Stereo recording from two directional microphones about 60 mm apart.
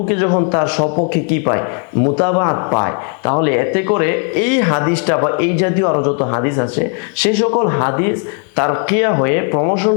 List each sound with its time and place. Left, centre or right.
0.1 s a man's voice: left